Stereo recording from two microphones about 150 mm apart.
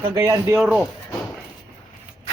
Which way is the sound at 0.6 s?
5° right (ahead or behind).